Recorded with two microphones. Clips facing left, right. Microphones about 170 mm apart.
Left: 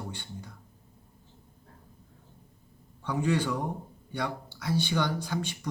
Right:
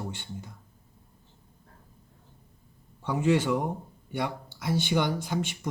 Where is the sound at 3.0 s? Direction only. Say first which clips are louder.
Right 3 dB; 25° right (ahead or behind).